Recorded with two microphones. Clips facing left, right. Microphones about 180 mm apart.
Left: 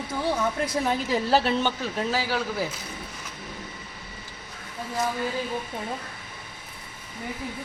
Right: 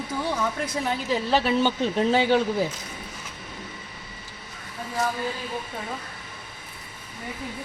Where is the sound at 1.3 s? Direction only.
Centre (ahead or behind).